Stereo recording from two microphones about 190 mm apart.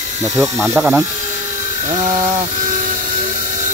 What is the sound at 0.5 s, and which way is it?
Speech, 15° right (ahead or behind).